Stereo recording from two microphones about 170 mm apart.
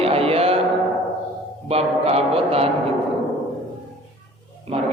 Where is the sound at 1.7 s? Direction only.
35° right (ahead or behind).